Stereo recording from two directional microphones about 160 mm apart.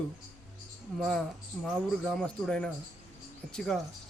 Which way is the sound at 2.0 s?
5° left (ahead or behind).